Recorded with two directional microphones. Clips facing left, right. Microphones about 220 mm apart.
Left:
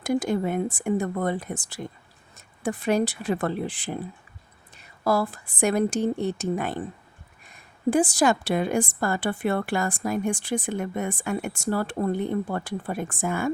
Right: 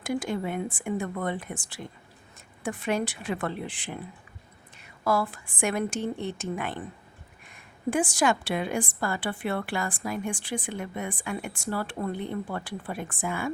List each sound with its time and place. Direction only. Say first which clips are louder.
0.0 s a woman's voice: left 5 dB; 40° left (ahead or behind)